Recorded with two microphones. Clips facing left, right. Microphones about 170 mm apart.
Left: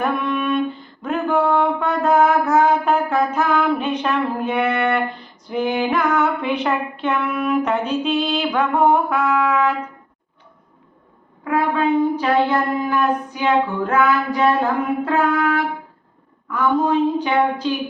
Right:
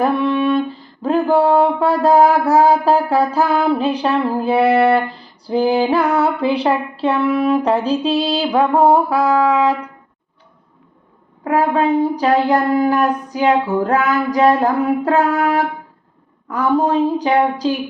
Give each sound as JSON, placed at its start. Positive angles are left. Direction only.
{"t": 0.0, "sound": "music", "side_deg": -30}
{"t": 11.4, "sound": "music", "side_deg": -40}